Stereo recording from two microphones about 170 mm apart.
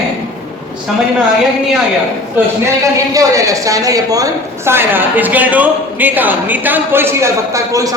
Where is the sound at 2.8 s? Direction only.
20° right (ahead or behind).